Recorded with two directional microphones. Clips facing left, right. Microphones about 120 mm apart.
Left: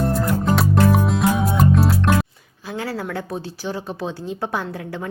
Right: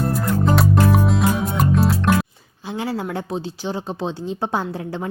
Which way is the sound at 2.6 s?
20° right (ahead or behind).